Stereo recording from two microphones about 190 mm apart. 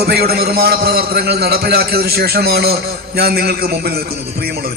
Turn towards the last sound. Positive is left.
turn(degrees=-55)  # may be behind; listen again after turning